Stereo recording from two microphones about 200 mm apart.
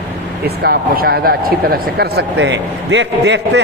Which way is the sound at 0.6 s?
50° right (ahead or behind).